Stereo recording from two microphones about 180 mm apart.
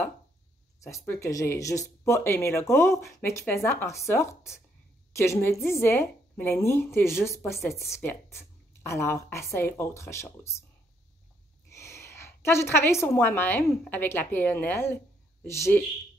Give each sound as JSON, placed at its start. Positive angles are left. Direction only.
{"t": 0.8, "sound": "a woman's voice", "side_deg": 15}
{"t": 11.7, "sound": "a woman's voice", "side_deg": 15}